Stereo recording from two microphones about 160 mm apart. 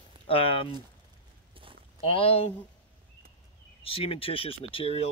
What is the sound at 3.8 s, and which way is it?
Speech, 35° left (ahead or behind).